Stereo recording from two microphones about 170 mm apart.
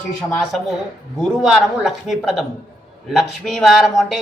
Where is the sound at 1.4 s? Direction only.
Centre (ahead or behind).